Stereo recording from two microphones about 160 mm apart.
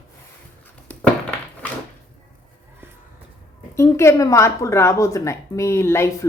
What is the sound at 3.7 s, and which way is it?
Speech, 15° left (ahead or behind).